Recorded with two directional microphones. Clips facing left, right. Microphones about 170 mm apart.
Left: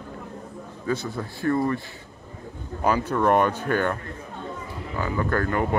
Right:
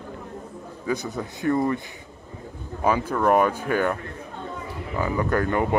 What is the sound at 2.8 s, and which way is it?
Speech, 5° right (ahead or behind).